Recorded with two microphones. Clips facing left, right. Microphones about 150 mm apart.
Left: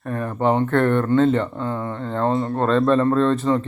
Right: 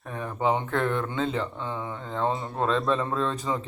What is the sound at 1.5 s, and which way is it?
Speech, 45° left (ahead or behind).